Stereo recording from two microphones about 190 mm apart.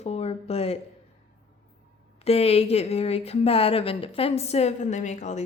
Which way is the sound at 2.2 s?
30° left (ahead or behind).